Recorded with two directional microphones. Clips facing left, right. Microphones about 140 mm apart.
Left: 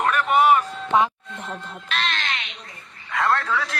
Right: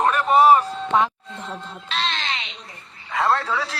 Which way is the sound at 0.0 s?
35° right (ahead or behind).